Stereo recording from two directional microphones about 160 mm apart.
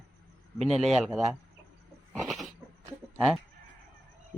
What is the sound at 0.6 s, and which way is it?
Speech, centre (ahead or behind).